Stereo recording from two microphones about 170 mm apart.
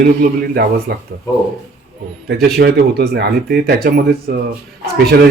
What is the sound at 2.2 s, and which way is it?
A man's voice, 80° right.